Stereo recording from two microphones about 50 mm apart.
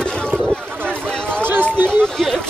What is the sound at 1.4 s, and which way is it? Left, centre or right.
Run, right.